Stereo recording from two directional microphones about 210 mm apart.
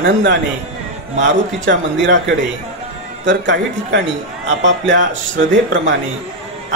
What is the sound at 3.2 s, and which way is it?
A man's voice, 60° right (ahead or behind).